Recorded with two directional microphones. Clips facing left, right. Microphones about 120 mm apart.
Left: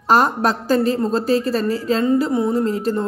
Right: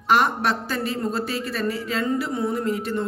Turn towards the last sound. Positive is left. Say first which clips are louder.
# left 5 dB
turn(degrees=35)  # may be behind; listen again after turning